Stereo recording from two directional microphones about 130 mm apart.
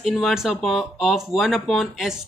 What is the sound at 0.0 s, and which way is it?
A man's voice, centre (ahead or behind).